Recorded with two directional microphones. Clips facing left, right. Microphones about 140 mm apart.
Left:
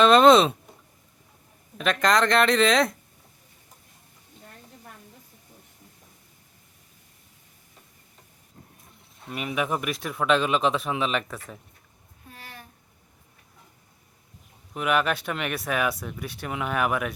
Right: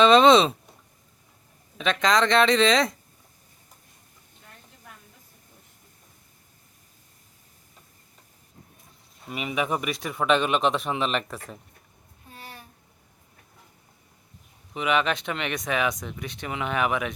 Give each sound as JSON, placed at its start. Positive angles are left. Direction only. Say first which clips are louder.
{"t": 0.0, "sound": "speech", "louder": "even", "side_deg": 0}
{"t": 1.8, "sound": "speech", "louder": "even", "side_deg": 0}
{"t": 9.2, "sound": "speech", "louder": "even", "side_deg": 0}
{"t": 12.3, "sound": "a sound", "louder": "right 2 dB", "side_deg": -30}
{"t": 14.7, "sound": "speech", "louder": "even", "side_deg": 5}